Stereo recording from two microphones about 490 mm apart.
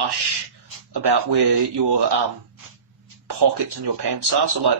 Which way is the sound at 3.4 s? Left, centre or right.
Right.